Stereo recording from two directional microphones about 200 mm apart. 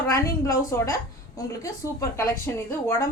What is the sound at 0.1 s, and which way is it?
A woman's voice, 15° left (ahead or behind).